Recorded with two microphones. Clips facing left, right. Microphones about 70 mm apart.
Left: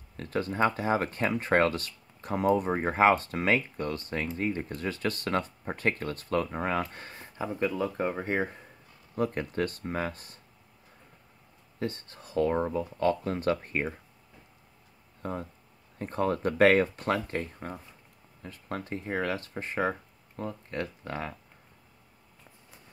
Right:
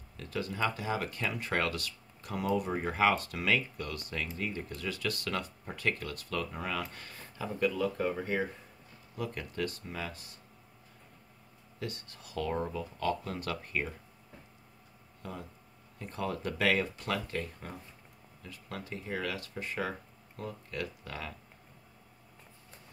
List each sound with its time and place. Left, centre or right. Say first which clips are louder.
0.2 s speech: left 6 dB; left
11.8 s speech: left 6 dB; left
15.2 s speech: left 8 dB; left